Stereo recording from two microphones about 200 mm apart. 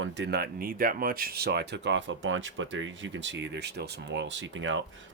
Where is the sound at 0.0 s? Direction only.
60° right (ahead or behind).